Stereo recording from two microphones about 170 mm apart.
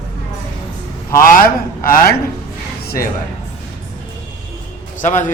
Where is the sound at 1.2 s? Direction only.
55° left (ahead or behind).